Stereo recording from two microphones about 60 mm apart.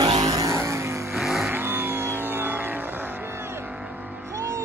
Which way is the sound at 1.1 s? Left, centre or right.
Centre.